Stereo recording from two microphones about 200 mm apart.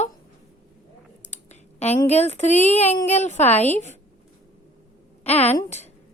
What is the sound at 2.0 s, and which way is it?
A woman's voice, 30° left (ahead or behind).